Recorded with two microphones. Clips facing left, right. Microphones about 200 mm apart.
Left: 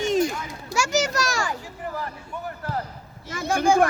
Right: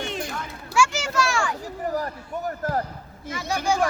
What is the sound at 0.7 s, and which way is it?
Speech, 40° left (ahead or behind).